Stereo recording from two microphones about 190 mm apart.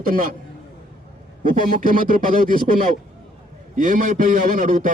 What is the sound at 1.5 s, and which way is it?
A man's voice, 45° right (ahead or behind).